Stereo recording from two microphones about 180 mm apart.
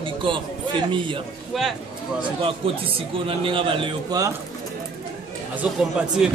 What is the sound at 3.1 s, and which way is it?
A man's voice, 30° right (ahead or behind).